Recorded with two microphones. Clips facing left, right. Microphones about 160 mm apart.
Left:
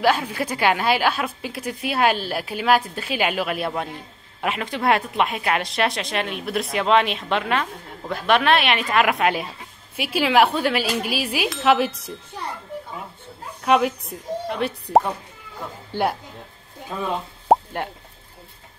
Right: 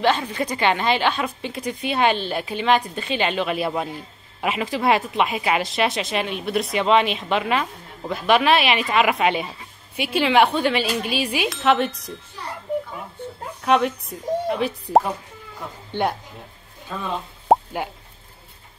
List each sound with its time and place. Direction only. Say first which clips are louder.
0.0 s a woman's voice: even; 10° left (ahead or behind)
13.6 s a woman's voice: left 1 dB; centre (ahead or behind)
17.5 s plop: even; centre (ahead or behind)